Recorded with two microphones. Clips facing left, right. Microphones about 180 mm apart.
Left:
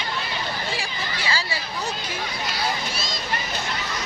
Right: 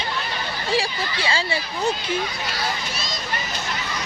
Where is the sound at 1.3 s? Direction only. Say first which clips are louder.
Right 3 dB; 25° right (ahead or behind).